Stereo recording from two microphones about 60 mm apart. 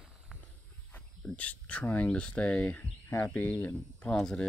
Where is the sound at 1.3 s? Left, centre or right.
Left.